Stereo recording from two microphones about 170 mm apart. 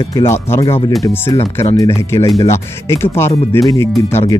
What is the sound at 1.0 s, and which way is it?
Speech, 10° left (ahead or behind).